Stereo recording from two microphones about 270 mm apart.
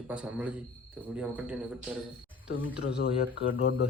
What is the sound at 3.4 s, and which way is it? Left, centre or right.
Speech, left.